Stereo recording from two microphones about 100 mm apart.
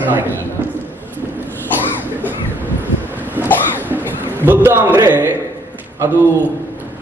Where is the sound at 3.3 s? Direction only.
20° right (ahead or behind).